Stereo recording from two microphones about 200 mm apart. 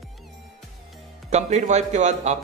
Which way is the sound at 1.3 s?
35° right (ahead or behind).